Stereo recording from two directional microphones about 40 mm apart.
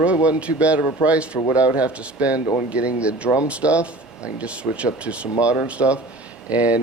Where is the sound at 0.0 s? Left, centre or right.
Right.